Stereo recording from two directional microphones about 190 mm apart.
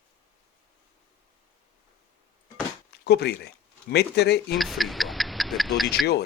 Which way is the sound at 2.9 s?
60° left (ahead or behind).